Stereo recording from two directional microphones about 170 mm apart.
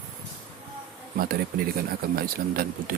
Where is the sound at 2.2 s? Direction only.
60° right (ahead or behind).